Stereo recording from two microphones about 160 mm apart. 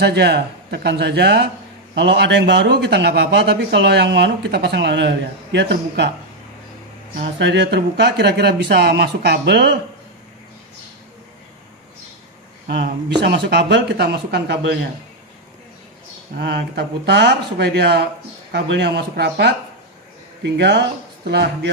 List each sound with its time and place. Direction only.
0.0 s speech: 90° right
7.3 s speech: 90° right
12.6 s speech: 90° right
16.3 s speech: 90° right